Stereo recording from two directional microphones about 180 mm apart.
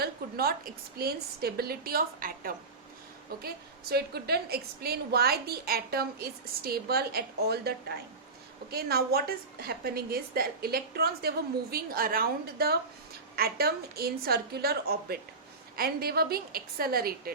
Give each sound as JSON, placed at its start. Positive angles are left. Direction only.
{"t": 0.0, "sound": "a woman's voice", "side_deg": -55}